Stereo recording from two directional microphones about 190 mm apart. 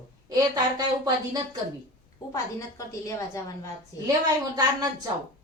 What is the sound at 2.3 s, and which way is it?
Speech, 15° left (ahead or behind).